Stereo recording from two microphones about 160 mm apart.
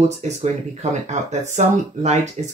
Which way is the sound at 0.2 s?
45° right (ahead or behind).